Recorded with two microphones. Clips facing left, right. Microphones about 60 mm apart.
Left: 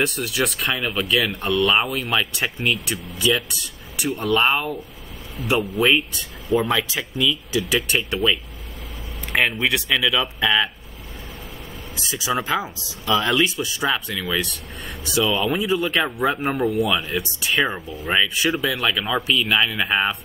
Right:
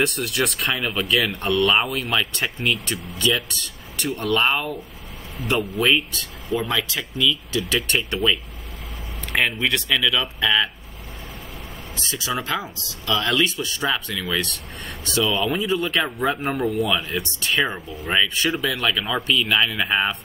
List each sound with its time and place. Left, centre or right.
0.0 s speech: centre
12.0 s speech: centre